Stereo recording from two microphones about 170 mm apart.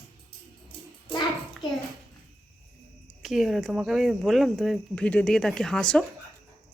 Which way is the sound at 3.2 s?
Centre (ahead or behind).